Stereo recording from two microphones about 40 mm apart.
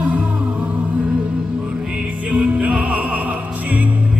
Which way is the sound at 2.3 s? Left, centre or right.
Right.